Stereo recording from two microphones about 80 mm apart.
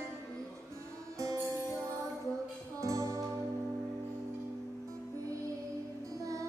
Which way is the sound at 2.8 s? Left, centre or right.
Right.